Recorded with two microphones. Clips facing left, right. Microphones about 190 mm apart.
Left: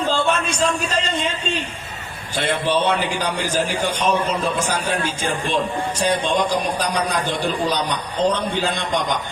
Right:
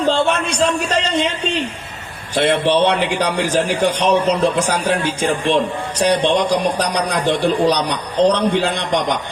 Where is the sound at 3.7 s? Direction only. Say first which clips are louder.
Right 5 dB; 75° right (ahead or behind).